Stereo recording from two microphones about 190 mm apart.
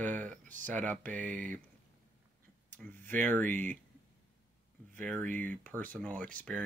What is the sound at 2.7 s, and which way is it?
Speech, 10° left (ahead or behind).